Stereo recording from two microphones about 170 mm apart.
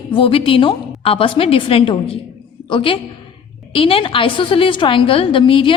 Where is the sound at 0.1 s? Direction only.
30° left (ahead or behind).